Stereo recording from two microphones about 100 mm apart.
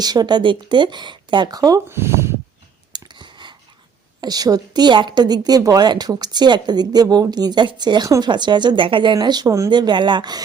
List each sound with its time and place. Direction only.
0.0 s a woman's voice: 40° right (ahead or behind)
1.9 s speech: 25° right (ahead or behind)
2.9 s clicking: 50° right (ahead or behind)
4.2 s a woman's voice: 40° right (ahead or behind)
9.1 s speech: 45° right (ahead or behind)
9.6 s a woman's voice: 50° right (ahead or behind)